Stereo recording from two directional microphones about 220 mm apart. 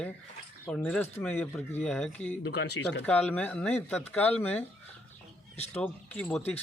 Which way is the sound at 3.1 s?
5° left (ahead or behind).